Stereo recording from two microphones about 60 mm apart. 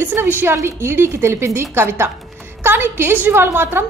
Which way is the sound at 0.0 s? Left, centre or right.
Right.